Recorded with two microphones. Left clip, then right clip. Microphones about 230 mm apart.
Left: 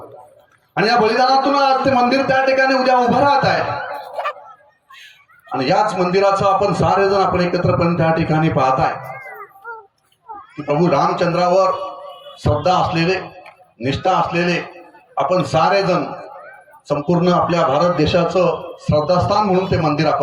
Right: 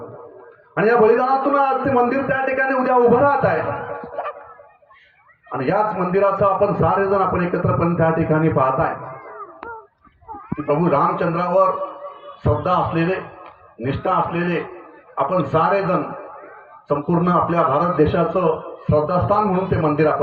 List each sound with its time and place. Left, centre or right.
0.7 s a man's voice: left
5.5 s a man's voice: left
10.6 s a man's voice: left